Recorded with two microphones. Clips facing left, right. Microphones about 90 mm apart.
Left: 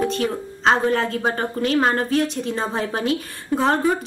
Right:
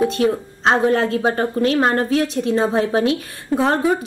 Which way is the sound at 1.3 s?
35° right (ahead or behind).